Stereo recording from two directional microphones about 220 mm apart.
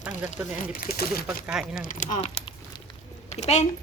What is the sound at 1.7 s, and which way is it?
Speech, 40° left (ahead or behind).